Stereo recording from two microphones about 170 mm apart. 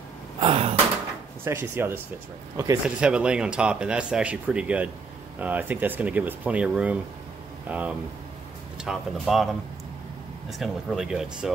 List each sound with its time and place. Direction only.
0.4 s gasp: 35° right (ahead or behind)
1.4 s speech: 15° right (ahead or behind)
3.0 s speech: 5° right (ahead or behind)
10.6 s speech: 5° right (ahead or behind)